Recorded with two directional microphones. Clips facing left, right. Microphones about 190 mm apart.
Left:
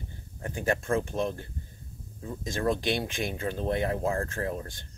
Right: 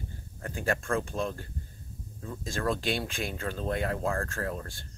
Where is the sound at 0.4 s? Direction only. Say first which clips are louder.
Left 2 dB; 20° left (ahead or behind).